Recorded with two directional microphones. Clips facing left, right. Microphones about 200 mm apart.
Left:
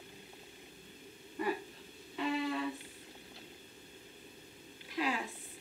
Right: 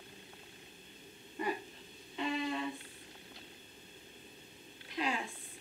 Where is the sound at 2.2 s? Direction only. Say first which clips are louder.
Left 1 dB; 20° right (ahead or behind).